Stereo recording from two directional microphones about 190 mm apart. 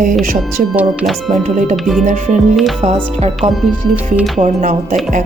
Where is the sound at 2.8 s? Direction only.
30° right (ahead or behind).